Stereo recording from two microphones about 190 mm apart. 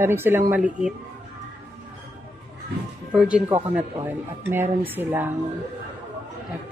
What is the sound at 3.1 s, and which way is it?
Speech, 5° right (ahead or behind).